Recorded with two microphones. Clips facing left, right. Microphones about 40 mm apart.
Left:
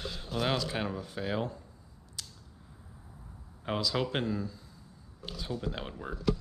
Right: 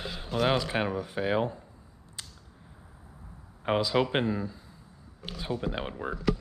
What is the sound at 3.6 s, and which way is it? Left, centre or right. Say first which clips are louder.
Speech: right 6 dB; right.